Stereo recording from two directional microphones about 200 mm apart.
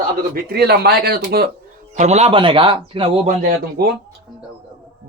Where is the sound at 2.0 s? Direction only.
35° right (ahead or behind).